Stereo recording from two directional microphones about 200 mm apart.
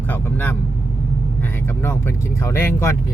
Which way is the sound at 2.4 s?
15° left (ahead or behind).